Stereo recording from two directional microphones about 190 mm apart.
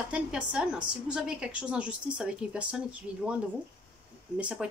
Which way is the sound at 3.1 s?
20° left (ahead or behind).